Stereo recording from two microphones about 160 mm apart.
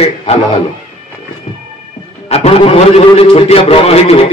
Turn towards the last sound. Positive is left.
turn(degrees=40)  # may be behind; listen again after turning